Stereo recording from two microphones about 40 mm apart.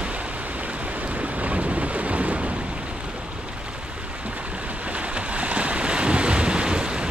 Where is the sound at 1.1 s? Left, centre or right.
Right.